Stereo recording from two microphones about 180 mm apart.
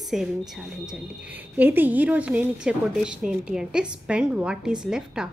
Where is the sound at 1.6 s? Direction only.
10° right (ahead or behind).